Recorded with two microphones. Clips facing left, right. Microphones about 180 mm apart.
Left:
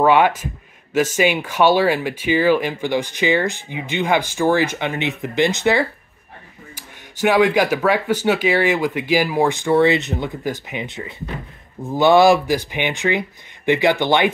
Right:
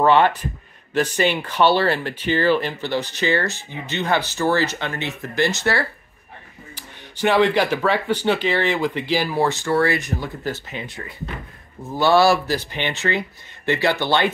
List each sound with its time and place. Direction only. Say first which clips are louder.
0.0 s speech: left 1 dB; 10° left (ahead or behind)
7.2 s speech: left 2 dB; 10° left (ahead or behind)